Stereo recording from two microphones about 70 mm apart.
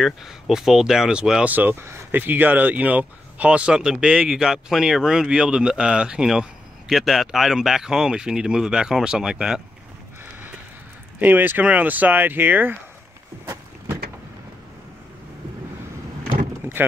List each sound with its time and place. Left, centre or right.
0.0 s speech: centre
1.5 s speech: right; by 9.6 s centre
11.1 s speech: right